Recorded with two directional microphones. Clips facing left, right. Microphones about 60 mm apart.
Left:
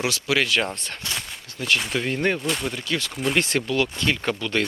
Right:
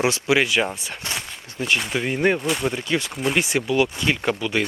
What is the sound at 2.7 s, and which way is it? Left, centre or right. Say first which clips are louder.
Speech: right 3 dB; centre.